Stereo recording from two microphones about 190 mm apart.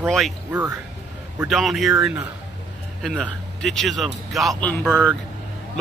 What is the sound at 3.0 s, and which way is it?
Speech, centre (ahead or behind).